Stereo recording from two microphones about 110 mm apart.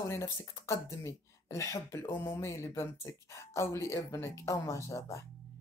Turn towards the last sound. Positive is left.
turn(degrees=30)  # may be behind; listen again after turning